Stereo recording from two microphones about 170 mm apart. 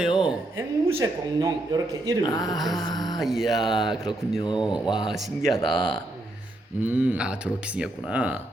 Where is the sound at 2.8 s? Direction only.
25° left (ahead or behind).